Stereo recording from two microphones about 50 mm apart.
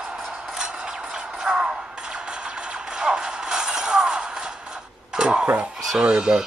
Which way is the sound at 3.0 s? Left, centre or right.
Centre.